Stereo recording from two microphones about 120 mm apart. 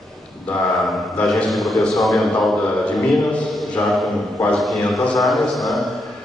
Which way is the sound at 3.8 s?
20° left (ahead or behind).